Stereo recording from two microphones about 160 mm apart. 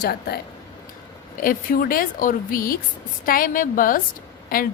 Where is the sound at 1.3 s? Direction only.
65° left (ahead or behind).